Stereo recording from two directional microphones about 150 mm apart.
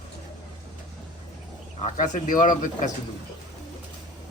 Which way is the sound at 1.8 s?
60° left (ahead or behind).